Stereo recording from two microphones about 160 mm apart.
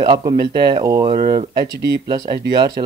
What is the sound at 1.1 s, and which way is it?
Speech, 50° right (ahead or behind).